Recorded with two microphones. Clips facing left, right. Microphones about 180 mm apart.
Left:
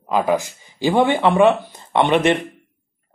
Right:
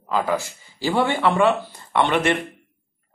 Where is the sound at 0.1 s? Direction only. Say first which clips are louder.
Left 4 dB; 20° left (ahead or behind).